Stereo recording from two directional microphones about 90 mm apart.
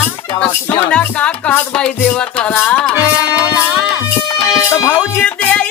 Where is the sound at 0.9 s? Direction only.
15° left (ahead or behind).